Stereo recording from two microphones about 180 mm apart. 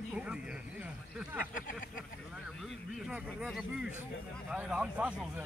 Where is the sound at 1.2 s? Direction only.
10° right (ahead or behind).